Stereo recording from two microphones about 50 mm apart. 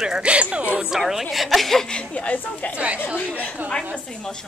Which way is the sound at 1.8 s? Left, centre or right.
Left.